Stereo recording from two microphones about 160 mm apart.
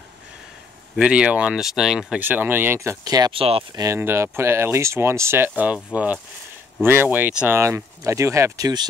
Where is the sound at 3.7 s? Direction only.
20° right (ahead or behind).